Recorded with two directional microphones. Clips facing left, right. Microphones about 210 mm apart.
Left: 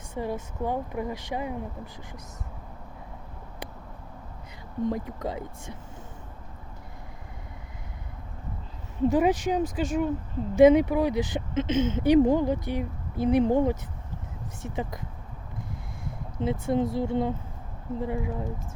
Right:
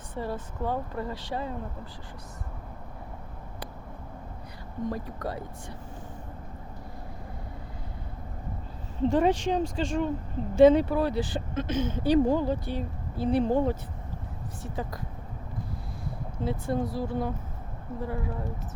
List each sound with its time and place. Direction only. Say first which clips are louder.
0.2 s speech: left 2 dB; 15° left (ahead or behind)
4.9 s speech: left 1 dB; 20° left (ahead or behind)
9.0 s speech: left 1 dB; 10° left (ahead or behind)
16.4 s speech: left 4 dB; 20° left (ahead or behind)